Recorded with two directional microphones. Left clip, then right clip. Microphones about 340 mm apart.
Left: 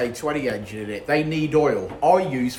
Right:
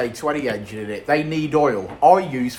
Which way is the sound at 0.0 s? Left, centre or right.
Centre.